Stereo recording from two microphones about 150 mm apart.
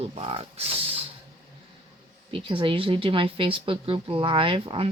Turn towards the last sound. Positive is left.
turn(degrees=-35)  # may be behind; listen again after turning